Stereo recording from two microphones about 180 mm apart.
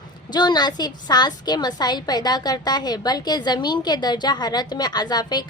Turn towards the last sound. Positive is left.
turn(degrees=25)  # may be behind; listen again after turning